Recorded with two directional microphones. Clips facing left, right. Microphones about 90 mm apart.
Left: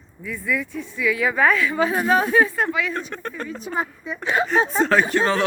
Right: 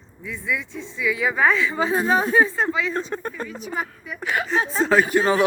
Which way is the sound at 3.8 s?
25° left (ahead or behind).